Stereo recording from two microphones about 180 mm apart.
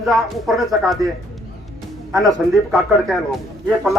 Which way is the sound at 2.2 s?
Centre (ahead or behind).